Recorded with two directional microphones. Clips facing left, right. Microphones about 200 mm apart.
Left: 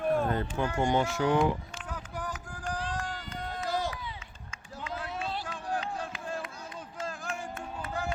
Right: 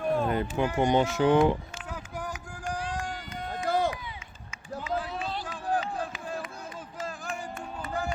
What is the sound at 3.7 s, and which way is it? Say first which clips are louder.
Run: right 6 dB; 55° right (ahead or behind).